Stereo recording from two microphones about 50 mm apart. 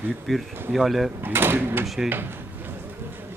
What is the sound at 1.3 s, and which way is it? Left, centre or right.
Speech, right.